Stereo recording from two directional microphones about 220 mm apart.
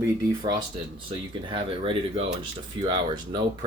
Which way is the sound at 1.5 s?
25° right (ahead or behind).